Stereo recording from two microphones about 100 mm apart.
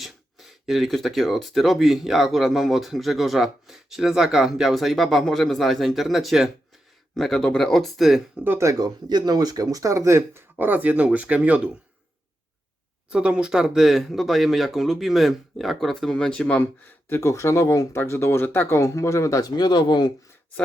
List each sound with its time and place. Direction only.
0.0 s speech: centre (ahead or behind)
8.4 s speech: 30° right (ahead or behind)
9.0 s speech: 45° right (ahead or behind); by 11.7 s 15° right (ahead or behind)
13.1 s speech: 10° right (ahead or behind); by 16.6 s 10° left (ahead or behind)
17.1 s speech: 30° left (ahead or behind); by 20.1 s 45° left (ahead or behind)